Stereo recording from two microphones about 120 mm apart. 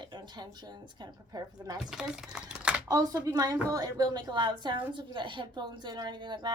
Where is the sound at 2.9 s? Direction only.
30° right (ahead or behind).